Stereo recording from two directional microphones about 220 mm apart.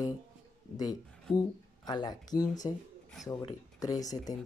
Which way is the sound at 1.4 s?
20° left (ahead or behind).